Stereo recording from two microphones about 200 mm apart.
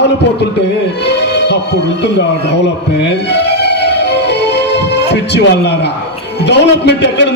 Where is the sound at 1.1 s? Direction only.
60° left (ahead or behind).